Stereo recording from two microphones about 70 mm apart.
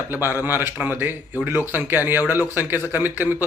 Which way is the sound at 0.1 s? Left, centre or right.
Right.